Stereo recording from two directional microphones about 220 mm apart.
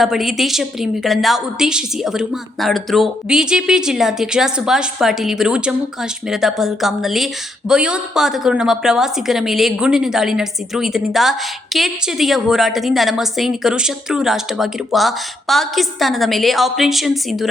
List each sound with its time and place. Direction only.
0.0 s a woman's voice: centre (ahead or behind)